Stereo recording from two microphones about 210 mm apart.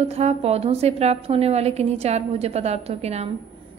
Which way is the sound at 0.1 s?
30° right (ahead or behind).